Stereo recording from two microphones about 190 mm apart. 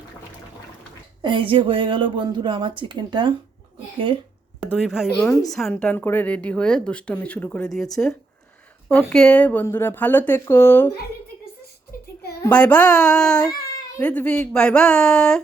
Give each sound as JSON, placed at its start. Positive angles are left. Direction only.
{"t": 1.2, "sound": "a woman's voice", "side_deg": -25}
{"t": 4.6, "sound": "a woman's voice", "side_deg": -5}
{"t": 12.4, "sound": "speech", "side_deg": 5}